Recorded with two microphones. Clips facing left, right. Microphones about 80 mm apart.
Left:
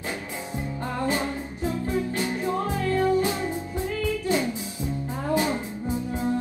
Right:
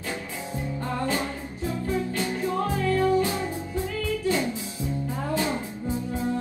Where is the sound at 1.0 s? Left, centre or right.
Left.